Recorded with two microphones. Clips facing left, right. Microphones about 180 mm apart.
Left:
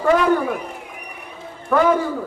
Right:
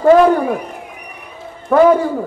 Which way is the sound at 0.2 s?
35° right (ahead or behind).